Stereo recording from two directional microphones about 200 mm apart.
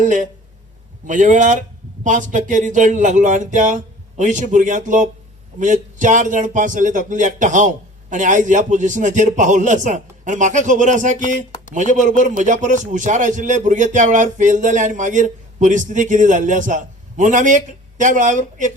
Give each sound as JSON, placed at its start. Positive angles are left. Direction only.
{"t": 0.0, "sound": "speech", "side_deg": -40}